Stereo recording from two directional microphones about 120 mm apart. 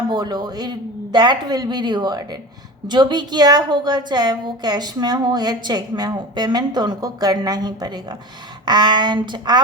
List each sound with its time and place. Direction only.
0.1 s a woman's voice: 35° right (ahead or behind)